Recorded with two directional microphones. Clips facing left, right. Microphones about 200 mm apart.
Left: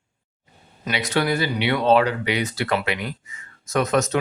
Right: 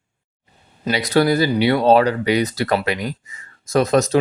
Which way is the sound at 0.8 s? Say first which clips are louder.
Right 6 dB; 35° right (ahead or behind).